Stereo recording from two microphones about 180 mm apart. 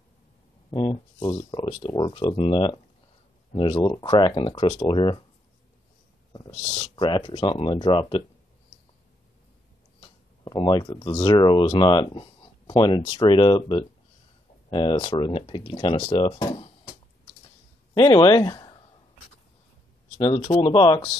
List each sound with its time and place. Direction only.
0.7 s speech: 25° left (ahead or behind)
6.7 s speech: 30° left (ahead or behind)
9.9 s speech: 25° left (ahead or behind)
17.9 s speech: 20° left (ahead or behind)
20.2 s speech: 30° left (ahead or behind)